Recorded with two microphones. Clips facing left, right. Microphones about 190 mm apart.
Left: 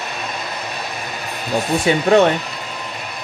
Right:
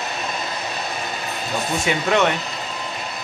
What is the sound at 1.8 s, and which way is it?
Speech, 35° left (ahead or behind).